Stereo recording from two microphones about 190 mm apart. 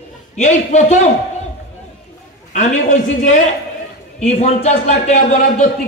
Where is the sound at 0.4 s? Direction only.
40° left (ahead or behind).